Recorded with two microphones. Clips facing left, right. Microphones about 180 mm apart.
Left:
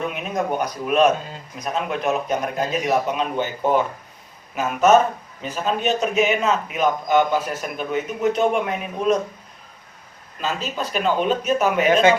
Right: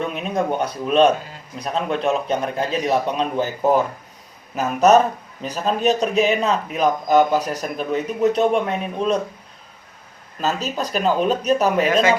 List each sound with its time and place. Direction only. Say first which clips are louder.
0.1 s a man's voice: right 2 dB; 30° right (ahead or behind)
10.4 s a man's voice: right 3 dB; 40° right (ahead or behind)